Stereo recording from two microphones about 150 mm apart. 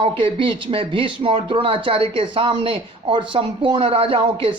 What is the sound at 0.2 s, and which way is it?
Speech, 35° right (ahead or behind).